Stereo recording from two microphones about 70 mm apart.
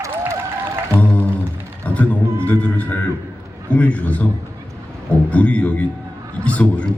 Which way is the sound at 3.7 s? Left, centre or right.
Left.